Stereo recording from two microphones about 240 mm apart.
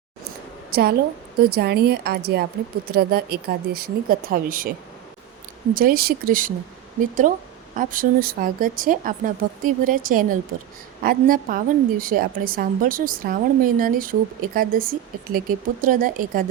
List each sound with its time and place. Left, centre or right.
0.7 s a woman's voice: right
5.7 s a woman's voice: right